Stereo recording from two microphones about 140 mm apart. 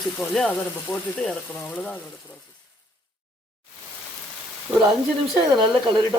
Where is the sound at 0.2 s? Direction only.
10° left (ahead or behind).